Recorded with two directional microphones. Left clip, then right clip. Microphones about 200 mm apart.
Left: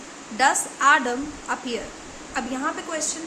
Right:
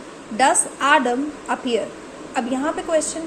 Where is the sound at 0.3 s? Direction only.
10° right (ahead or behind).